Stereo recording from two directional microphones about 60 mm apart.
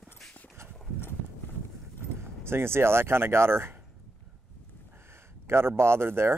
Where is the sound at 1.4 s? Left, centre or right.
Left.